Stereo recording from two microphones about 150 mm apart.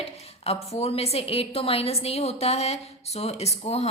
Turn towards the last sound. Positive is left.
turn(degrees=45)  # may be behind; listen again after turning